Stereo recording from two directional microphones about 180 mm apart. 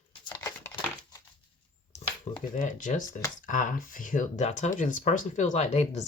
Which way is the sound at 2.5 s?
45° left (ahead or behind).